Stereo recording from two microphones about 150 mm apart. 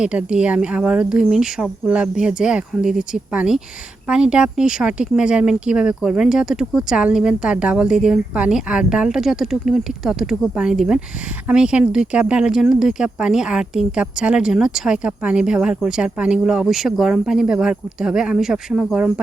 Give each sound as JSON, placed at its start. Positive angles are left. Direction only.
{"t": 0.0, "sound": "speech", "side_deg": -5}